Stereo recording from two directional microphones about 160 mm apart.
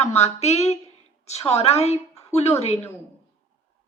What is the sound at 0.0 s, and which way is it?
A woman's voice, 40° left (ahead or behind).